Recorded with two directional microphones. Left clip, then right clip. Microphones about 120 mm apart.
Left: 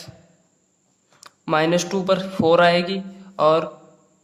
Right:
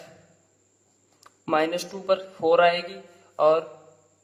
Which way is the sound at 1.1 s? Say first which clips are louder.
Left 3 dB; 35° left (ahead or behind).